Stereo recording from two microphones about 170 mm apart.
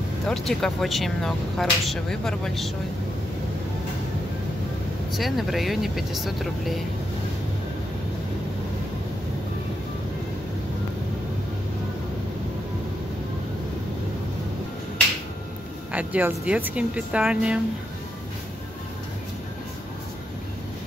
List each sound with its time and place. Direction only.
0.3 s speech: centre (ahead or behind)
5.1 s speech: centre (ahead or behind)
15.9 s speech: 10° right (ahead or behind)